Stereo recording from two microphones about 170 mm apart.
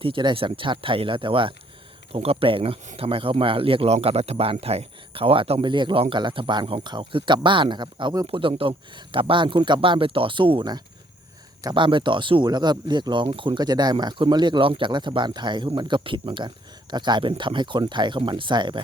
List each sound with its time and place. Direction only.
0.0 s speech: 30° right (ahead or behind)